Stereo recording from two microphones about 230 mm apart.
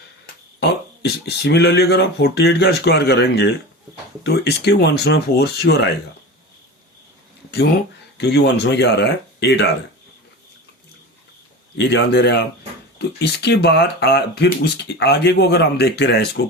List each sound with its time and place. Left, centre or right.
0.6 s speech: left
8.2 s speech: left
11.8 s speech: left